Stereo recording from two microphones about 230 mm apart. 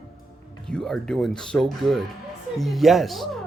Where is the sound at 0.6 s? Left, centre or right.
Centre.